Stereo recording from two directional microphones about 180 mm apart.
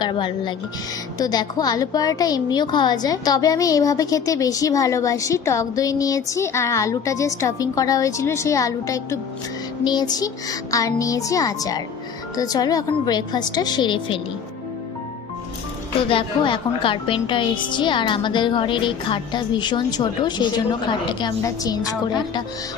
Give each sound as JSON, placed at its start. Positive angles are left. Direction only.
{"t": 0.0, "sound": "a woman's voice", "side_deg": 25}
{"t": 16.0, "sound": "a woman's voice", "side_deg": 30}